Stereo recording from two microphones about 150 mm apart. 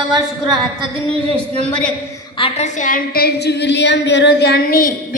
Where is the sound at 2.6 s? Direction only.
55° left (ahead or behind); by 4.9 s 75° left (ahead or behind).